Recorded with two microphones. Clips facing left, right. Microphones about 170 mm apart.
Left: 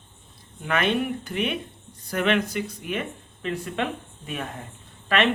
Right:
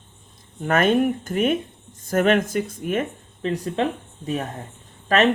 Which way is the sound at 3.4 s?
35° right (ahead or behind).